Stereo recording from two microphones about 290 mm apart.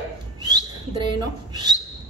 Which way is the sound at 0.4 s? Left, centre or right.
Centre.